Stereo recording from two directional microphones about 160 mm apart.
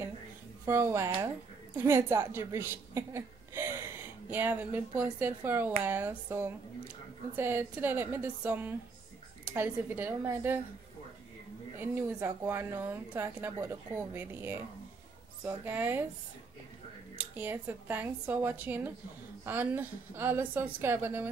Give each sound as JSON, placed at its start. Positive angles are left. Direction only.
{"t": 0.7, "sound": "a woman's voice", "side_deg": -15}
{"t": 11.8, "sound": "speech", "side_deg": -15}
{"t": 17.2, "sound": "speech", "side_deg": -10}